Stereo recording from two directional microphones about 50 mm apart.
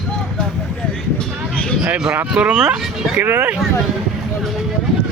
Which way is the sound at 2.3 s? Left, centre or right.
Centre.